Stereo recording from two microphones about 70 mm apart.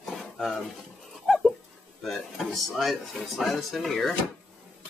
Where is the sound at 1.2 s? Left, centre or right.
Centre.